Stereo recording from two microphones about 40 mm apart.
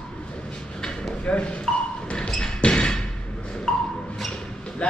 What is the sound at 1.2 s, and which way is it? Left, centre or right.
Speech, left.